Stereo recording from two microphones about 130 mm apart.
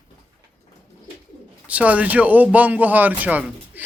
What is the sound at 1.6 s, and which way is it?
A man's voice, 10° right (ahead or behind).